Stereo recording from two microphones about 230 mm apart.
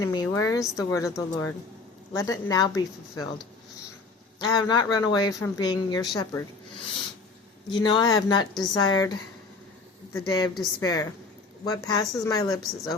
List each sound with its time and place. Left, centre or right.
0.0 s speech: centre
7.7 s a woman's voice: centre